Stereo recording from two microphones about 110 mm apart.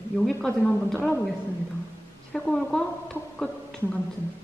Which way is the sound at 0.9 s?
15° left (ahead or behind).